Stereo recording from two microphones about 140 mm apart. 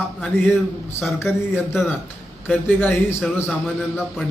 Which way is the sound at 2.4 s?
15° left (ahead or behind).